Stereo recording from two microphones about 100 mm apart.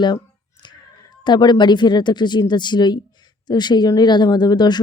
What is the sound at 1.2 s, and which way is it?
Speech, 50° left (ahead or behind).